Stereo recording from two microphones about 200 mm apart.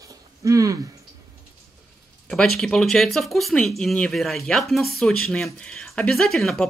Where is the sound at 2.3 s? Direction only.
5° left (ahead or behind).